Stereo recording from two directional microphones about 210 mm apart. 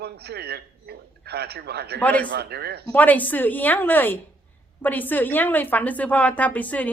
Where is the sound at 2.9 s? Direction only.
10° left (ahead or behind).